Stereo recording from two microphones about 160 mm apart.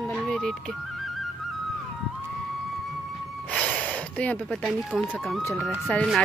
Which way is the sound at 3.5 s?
10° left (ahead or behind).